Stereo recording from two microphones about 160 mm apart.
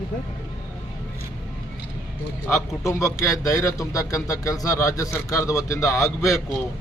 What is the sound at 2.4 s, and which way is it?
A man's voice, 20° left (ahead or behind).